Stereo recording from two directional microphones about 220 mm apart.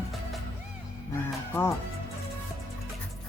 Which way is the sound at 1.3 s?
10° left (ahead or behind).